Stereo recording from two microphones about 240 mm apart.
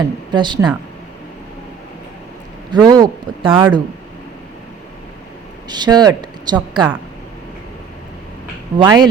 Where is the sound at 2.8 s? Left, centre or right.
Centre.